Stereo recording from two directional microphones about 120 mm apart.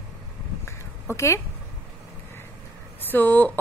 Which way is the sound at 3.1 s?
15° left (ahead or behind).